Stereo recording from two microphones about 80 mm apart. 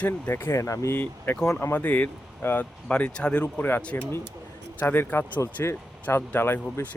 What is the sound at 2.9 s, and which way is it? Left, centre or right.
Speech, centre.